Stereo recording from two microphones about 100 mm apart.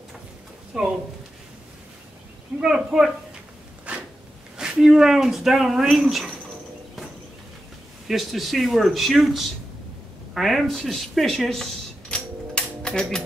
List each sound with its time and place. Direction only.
0.7 s speech: 5° right (ahead or behind)
2.6 s speech: 5° right (ahead or behind)
3.9 s a sound: 15° right (ahead or behind)
4.6 s speech: 5° right (ahead or behind)
8.1 s speech: centre (ahead or behind)
10.3 s cash register: centre (ahead or behind)